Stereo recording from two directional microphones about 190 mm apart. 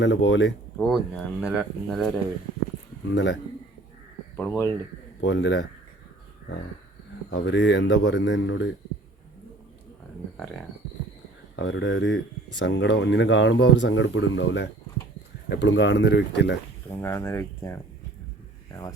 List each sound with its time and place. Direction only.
0.0 s speech: 70° left (ahead or behind)
0.8 s speech: centre (ahead or behind)
4.4 s speech: 15° left (ahead or behind)
5.2 s speech: 70° left (ahead or behind)
7.3 s speech: 65° left (ahead or behind)
11.5 s speech: 75° left (ahead or behind)
16.9 s speech: 10° left (ahead or behind)